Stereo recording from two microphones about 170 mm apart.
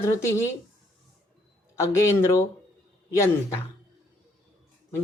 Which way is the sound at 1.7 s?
15° left (ahead or behind).